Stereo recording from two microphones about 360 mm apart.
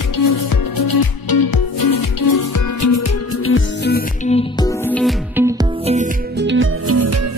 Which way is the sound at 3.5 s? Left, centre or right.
Left.